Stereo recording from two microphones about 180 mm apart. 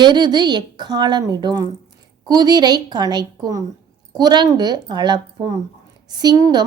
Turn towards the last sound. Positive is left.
turn(degrees=-20)  # may be behind; listen again after turning